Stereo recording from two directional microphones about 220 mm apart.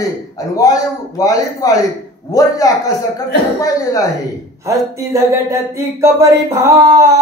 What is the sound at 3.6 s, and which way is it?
Speech, 15° left (ahead or behind).